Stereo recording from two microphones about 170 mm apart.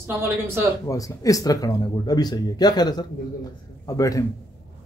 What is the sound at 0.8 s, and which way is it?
Speech, 20° left (ahead or behind).